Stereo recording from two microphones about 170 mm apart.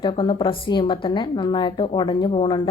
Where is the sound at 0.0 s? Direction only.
30° left (ahead or behind).